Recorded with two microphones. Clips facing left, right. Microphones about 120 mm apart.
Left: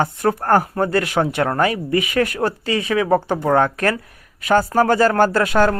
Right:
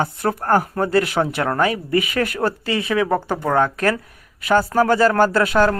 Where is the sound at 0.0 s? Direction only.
35° left (ahead or behind).